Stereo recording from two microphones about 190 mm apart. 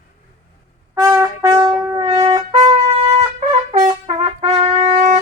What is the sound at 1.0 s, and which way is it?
Trumpet, 15° right (ahead or behind).